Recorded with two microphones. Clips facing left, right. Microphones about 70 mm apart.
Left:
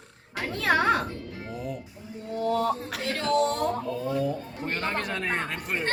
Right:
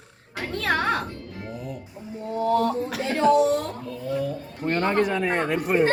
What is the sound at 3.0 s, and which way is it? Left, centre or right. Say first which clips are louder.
Speech: right 6 dB; centre.